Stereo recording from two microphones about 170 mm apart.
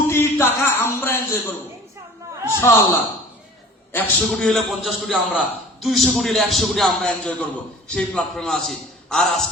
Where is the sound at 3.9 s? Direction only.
5° left (ahead or behind).